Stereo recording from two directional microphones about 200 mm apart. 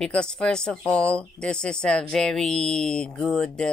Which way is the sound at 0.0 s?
5° left (ahead or behind).